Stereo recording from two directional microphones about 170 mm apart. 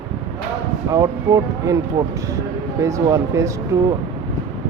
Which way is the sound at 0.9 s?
20° right (ahead or behind).